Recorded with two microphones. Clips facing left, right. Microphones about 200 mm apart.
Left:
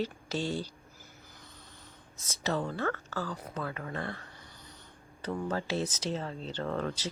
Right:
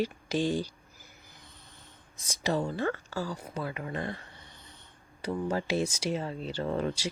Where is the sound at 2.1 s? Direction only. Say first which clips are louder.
Right 3 dB; 15° right (ahead or behind).